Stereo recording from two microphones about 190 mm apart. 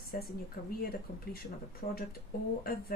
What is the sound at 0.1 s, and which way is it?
Speech, 45° left (ahead or behind).